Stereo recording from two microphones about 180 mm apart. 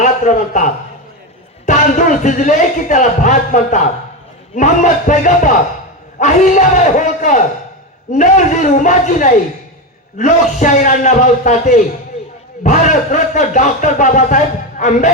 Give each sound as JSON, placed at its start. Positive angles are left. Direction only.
{"t": 0.0, "sound": "a man's voice", "side_deg": 45}